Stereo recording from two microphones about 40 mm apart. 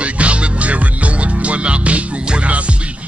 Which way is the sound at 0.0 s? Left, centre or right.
Right.